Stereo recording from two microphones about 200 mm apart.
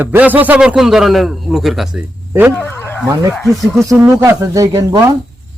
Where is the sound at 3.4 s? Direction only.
Centre (ahead or behind).